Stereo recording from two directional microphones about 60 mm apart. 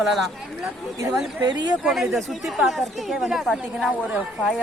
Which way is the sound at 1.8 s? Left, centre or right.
Centre.